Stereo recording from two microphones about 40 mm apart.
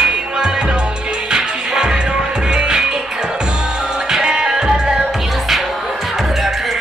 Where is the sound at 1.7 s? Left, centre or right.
Right.